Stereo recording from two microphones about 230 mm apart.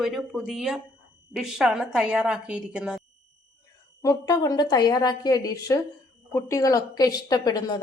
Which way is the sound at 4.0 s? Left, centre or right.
Centre.